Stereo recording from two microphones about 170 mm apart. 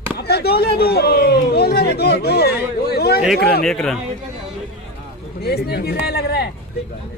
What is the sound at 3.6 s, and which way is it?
Speech, centre (ahead or behind).